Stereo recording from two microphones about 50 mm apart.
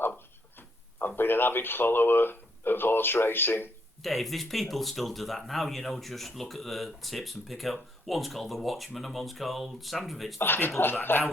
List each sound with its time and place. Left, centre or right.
0.9 s speech: left
4.0 s speech: centre
10.4 s speech: left